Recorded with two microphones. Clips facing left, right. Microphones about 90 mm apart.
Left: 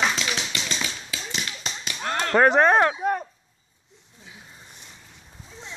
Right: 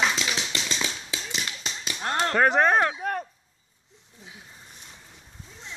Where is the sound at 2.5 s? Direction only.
40° left (ahead or behind).